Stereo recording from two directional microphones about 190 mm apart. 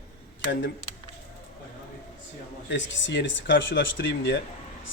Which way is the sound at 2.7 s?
75° left (ahead or behind).